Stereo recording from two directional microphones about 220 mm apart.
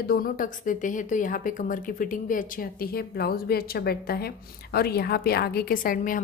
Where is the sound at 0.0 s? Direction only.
40° left (ahead or behind).